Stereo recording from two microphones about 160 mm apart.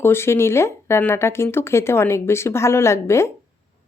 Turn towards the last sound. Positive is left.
turn(degrees=15)  # may be behind; listen again after turning